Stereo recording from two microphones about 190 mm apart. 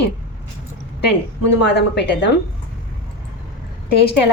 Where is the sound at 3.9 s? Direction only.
60° left (ahead or behind).